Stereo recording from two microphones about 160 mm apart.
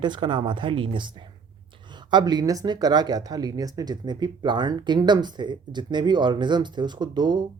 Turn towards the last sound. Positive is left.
turn(degrees=-30)  # may be behind; listen again after turning